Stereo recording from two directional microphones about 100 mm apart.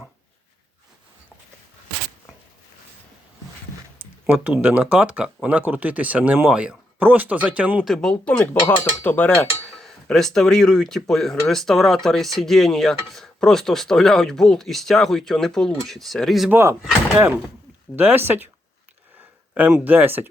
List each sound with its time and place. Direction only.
4.6 s speech: 15° right (ahead or behind)
7.9 s speech: 5° left (ahead or behind)
9.7 s speech: 5° left (ahead or behind)
16.5 s speech: 25° right (ahead or behind)
19.5 s speech: 15° right (ahead or behind)